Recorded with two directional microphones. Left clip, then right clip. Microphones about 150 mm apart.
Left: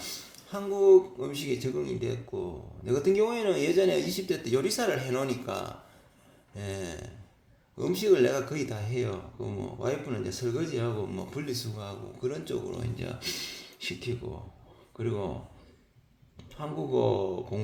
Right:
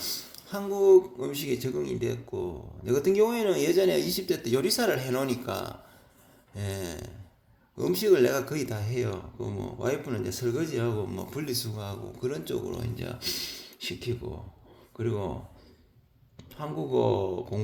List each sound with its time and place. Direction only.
0.0 s speech: 35° right (ahead or behind)
16.4 s speech: 30° right (ahead or behind)